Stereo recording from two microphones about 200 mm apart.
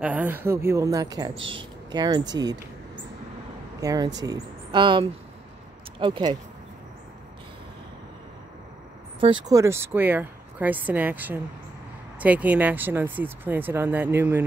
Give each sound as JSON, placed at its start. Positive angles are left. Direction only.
{"t": 0.0, "sound": "a woman's voice", "side_deg": -10}
{"t": 3.8, "sound": "speech", "side_deg": -20}
{"t": 9.2, "sound": "a woman's voice", "side_deg": -20}